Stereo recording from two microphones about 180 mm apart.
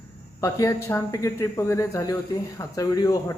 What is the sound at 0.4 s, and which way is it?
Speech, 15° left (ahead or behind).